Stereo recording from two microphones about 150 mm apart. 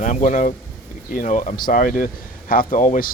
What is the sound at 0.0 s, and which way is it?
A man's voice, 55° left (ahead or behind).